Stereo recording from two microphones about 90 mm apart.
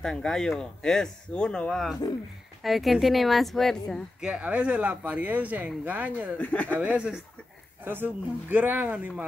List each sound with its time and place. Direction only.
0.0 s speech: 5° left (ahead or behind)
4.2 s speech: 10° right (ahead or behind)
6.3 s speech: 15° left (ahead or behind)
6.8 s speech: 20° right (ahead or behind)